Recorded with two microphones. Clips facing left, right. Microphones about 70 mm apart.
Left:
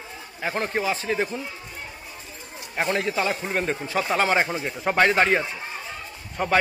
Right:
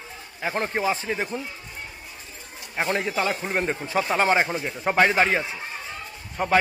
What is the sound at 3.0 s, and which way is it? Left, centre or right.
Speech, centre.